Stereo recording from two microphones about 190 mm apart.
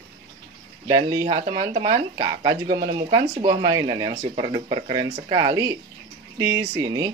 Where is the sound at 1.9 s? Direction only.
25° right (ahead or behind).